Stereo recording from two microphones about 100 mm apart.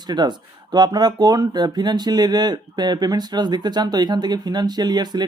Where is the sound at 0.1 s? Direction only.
45° right (ahead or behind).